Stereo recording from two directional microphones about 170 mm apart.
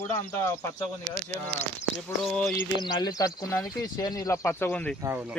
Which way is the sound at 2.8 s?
25° left (ahead or behind).